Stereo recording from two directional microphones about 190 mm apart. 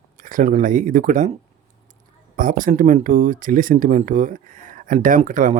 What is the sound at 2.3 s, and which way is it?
Speech, 45° right (ahead or behind).